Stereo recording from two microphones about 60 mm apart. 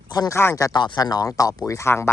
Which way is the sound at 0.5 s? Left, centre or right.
Left.